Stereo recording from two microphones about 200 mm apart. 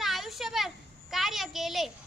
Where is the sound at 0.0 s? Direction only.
Centre (ahead or behind).